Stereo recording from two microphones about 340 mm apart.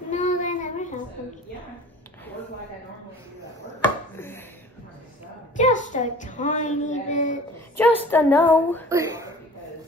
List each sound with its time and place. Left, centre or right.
0.1 s child singing: left
3.8 s chopping: centre
5.6 s a woman's voice: left
8.0 s a woman's voice: centre
8.8 s a sound: centre